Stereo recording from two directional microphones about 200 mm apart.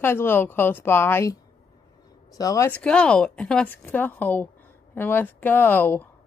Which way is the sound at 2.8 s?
5° left (ahead or behind).